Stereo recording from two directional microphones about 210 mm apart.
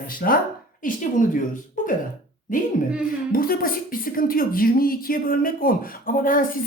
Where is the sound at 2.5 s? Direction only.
40° left (ahead or behind).